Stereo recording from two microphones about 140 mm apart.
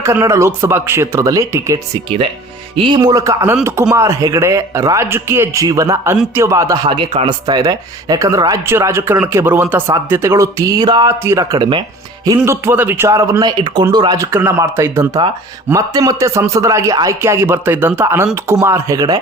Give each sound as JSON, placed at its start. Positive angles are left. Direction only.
{"t": 0.0, "sound": "speech", "side_deg": -20}
{"t": 2.0, "sound": "speech", "side_deg": -40}
{"t": 6.8, "sound": "speech", "side_deg": -35}
{"t": 11.2, "sound": "speech", "side_deg": -20}
{"t": 12.5, "sound": "speech", "side_deg": -15}
{"t": 14.3, "sound": "speech", "side_deg": -15}